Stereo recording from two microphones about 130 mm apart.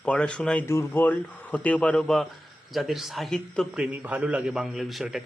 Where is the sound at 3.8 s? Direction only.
10° right (ahead or behind).